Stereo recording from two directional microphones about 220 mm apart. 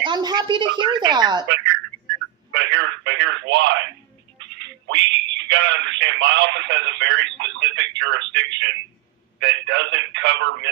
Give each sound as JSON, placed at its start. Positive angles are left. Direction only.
{"t": 0.0, "sound": "a woman's voice", "side_deg": -20}
{"t": 1.5, "sound": "a sound", "side_deg": -55}
{"t": 2.5, "sound": "telephone", "side_deg": -55}
{"t": 4.4, "sound": "a man's voice", "side_deg": -55}